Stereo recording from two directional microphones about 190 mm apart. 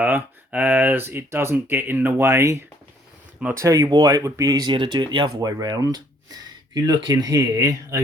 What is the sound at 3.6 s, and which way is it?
Speech, 20° right (ahead or behind).